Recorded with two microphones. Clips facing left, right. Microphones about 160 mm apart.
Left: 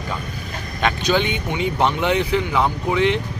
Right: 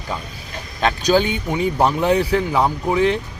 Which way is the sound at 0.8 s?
35° right (ahead or behind).